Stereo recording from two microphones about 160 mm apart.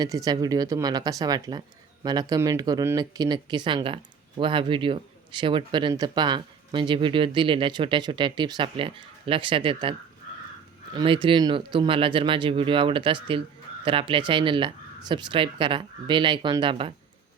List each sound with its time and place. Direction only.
0.0 s speech: 20° right (ahead or behind)
10.9 s speech: 30° right (ahead or behind)